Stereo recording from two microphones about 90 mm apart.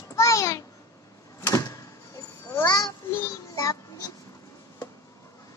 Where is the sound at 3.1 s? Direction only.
35° left (ahead or behind).